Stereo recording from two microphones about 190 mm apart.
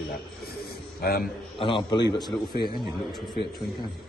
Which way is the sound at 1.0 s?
55° left (ahead or behind).